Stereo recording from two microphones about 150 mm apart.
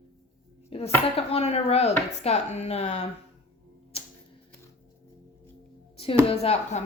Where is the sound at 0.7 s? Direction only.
40° left (ahead or behind).